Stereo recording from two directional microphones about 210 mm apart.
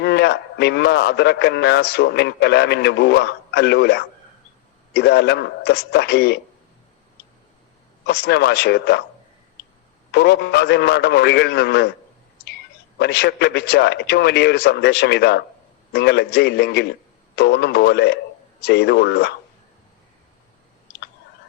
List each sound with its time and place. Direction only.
0.0 s a man's voice: 50° left (ahead or behind)
8.0 s a man's voice: 50° left (ahead or behind)
10.1 s a man's voice: 50° left (ahead or behind)
13.0 s a man's voice: 50° left (ahead or behind)